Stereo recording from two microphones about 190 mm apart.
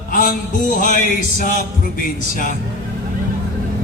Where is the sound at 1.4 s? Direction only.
45° left (ahead or behind).